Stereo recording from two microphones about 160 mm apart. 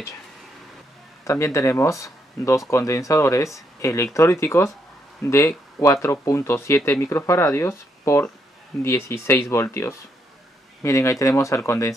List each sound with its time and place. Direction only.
1.2 s speech: 20° left (ahead or behind)